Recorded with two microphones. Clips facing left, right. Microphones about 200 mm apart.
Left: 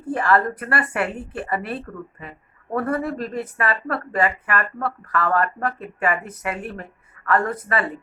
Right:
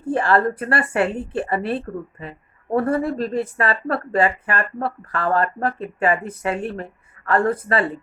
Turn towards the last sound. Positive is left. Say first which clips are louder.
# right 4 dB
turn(degrees=-30)  # may be behind; listen again after turning